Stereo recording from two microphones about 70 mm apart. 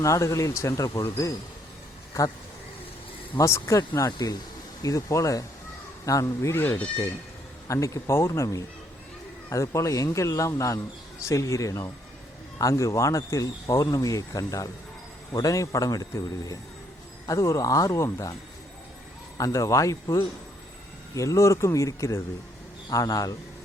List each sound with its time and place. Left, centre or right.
0.0 s a man's voice: left
3.3 s speech: left
6.5 s speech: left
7.7 s a man's voice: left
19.4 s speech: left
21.2 s a man's voice: left